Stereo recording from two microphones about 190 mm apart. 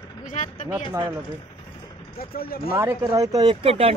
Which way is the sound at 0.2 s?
40° left (ahead or behind).